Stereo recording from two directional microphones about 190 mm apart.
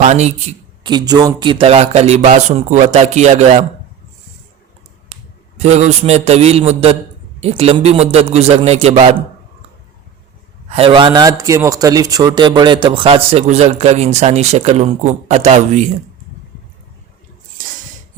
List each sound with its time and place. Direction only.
0.0 s speech: 35° right (ahead or behind)
0.9 s speech: 20° right (ahead or behind)
5.5 s speech: 35° right (ahead or behind)
10.7 s speech: 30° right (ahead or behind)